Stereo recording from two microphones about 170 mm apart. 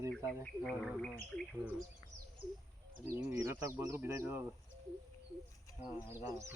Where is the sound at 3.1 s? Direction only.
15° right (ahead or behind).